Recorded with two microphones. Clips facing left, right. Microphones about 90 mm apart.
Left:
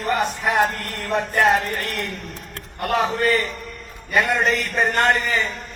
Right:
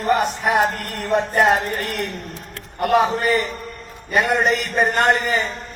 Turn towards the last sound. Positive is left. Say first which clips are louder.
# right 2 dB
turn(degrees=-20)  # may be behind; listen again after turning